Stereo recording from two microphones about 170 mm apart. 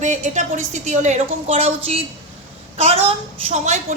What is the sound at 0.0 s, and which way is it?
A woman's voice, 45° right (ahead or behind).